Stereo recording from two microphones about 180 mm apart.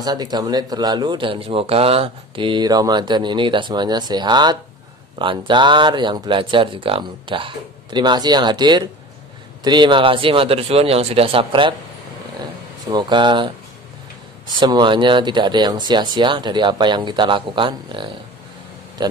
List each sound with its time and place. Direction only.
0.0 s speech: 20° right (ahead or behind)
12.9 s speech: 25° right (ahead or behind)
14.6 s speech: 25° right (ahead or behind)